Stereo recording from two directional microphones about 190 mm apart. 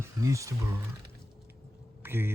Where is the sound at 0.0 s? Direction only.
15° right (ahead or behind).